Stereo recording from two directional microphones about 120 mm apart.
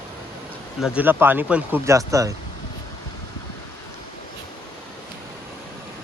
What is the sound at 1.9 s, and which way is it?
Speech, 25° right (ahead or behind).